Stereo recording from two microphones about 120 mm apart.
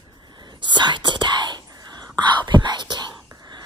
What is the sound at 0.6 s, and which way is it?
Whispering, 40° right (ahead or behind).